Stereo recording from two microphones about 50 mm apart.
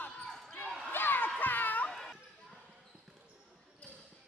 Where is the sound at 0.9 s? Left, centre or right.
Left.